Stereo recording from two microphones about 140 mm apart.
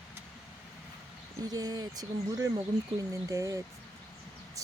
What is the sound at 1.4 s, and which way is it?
Speech, 25° right (ahead or behind).